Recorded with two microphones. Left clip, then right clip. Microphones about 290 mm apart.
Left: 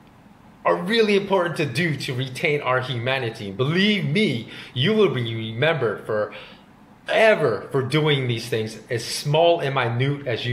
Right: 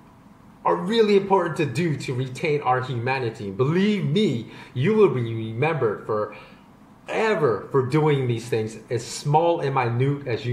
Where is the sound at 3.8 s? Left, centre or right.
Centre.